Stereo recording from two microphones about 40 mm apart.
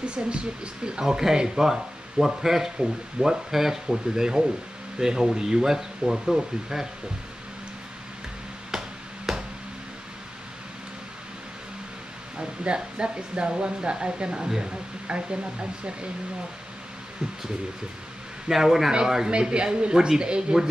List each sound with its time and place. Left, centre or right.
0.0 s speech: right
1.0 s speech: centre
8.7 s a sound: centre
12.4 s speech: right
18.5 s speech: centre
19.3 s speech: right